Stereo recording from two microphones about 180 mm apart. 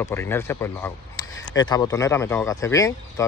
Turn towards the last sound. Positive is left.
turn(degrees=15)  # may be behind; listen again after turning